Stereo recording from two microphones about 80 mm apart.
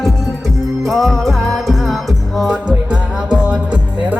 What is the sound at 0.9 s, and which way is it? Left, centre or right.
Music, centre.